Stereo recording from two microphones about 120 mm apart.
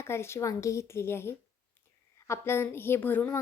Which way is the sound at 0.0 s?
20° left (ahead or behind).